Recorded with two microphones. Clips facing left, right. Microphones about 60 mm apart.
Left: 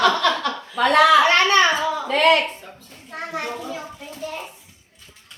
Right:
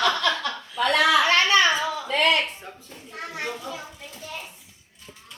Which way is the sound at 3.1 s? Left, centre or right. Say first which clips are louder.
Left 6 dB; left.